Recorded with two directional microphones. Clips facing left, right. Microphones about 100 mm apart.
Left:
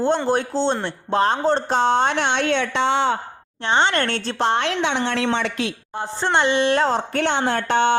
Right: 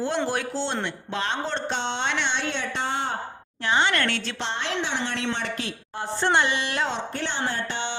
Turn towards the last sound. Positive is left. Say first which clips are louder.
# left 11 dB
turn(degrees=55)  # may be behind; listen again after turning